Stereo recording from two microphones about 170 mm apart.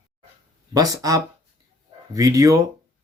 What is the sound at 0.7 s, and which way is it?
Speech, 20° right (ahead or behind).